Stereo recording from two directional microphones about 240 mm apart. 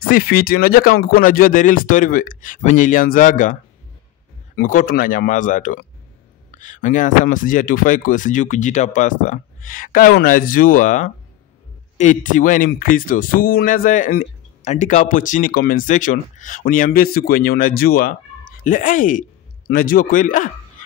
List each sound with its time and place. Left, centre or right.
0.1 s speech: left
4.6 s speech: left